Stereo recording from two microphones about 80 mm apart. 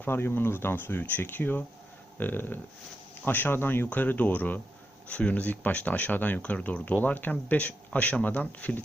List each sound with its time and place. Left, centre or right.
0.0 s speech: left